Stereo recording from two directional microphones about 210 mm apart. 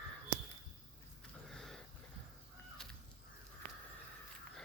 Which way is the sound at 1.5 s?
Centre (ahead or behind).